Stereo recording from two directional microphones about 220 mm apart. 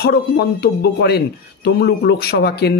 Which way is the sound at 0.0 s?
45° left (ahead or behind).